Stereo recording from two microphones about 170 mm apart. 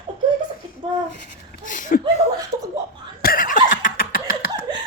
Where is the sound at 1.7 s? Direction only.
50° left (ahead or behind).